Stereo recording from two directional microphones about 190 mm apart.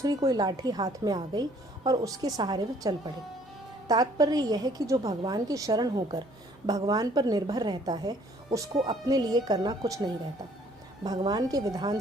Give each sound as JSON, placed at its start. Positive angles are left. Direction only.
{"t": 0.0, "sound": "a woman's voice", "side_deg": -20}